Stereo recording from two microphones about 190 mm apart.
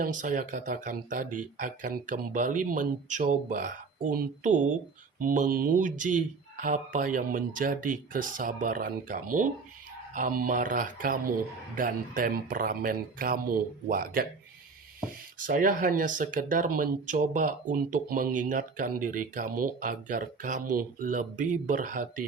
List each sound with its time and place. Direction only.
0.0 s speech: 45° right (ahead or behind)
15.4 s speech: 45° right (ahead or behind)